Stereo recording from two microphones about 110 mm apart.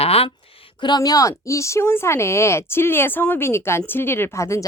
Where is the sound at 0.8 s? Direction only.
35° left (ahead or behind).